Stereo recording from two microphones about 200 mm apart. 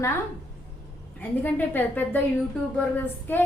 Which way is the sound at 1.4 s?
10° left (ahead or behind).